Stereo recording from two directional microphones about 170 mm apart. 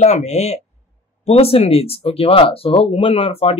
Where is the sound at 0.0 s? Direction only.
40° left (ahead or behind).